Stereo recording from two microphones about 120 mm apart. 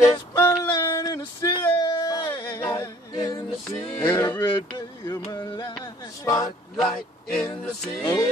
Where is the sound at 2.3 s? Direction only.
20° left (ahead or behind).